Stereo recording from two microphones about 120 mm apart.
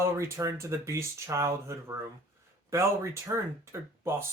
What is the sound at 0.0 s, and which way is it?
Speech, 25° right (ahead or behind).